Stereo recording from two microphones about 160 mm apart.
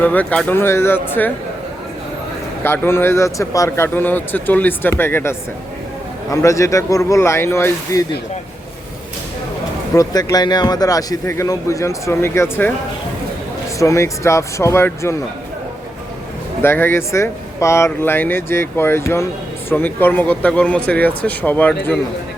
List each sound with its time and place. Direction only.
0.0 s a man's voice: 10° left (ahead or behind)
2.6 s a man's voice: 15° left (ahead or behind)
9.9 s a man's voice: 20° left (ahead or behind)
13.7 s a man's voice: 20° left (ahead or behind)
16.6 s a man's voice: 15° left (ahead or behind)